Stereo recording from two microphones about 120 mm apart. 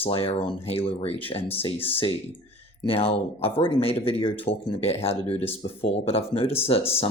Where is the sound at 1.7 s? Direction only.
15° left (ahead or behind).